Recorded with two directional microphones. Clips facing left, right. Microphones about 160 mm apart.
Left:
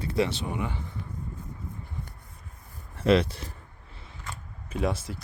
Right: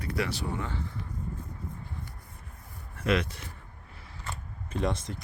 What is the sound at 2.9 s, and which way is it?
Speech, 30° left (ahead or behind).